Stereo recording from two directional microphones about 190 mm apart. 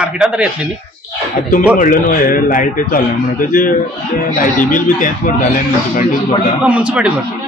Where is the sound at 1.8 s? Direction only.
45° left (ahead or behind).